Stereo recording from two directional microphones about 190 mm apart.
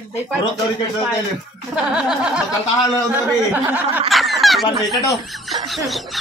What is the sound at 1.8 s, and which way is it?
Speech, 5° right (ahead or behind).